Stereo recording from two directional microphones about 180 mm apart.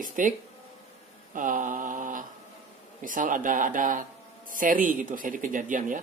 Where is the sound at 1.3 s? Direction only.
45° right (ahead or behind).